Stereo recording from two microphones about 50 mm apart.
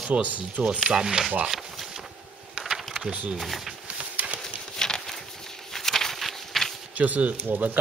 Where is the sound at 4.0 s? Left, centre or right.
Right.